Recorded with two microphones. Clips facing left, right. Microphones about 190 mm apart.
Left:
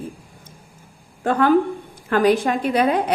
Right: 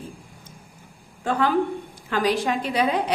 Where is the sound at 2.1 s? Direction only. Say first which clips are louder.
Left 6 dB; 50° left (ahead or behind).